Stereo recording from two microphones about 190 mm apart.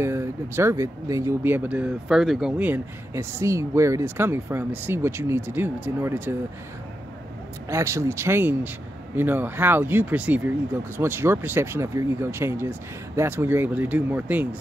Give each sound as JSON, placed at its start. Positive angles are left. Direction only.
{"t": 0.0, "sound": "speech", "side_deg": -15}
{"t": 7.7, "sound": "speech", "side_deg": -15}